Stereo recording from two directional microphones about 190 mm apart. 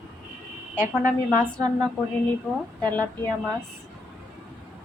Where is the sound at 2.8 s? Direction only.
10° left (ahead or behind).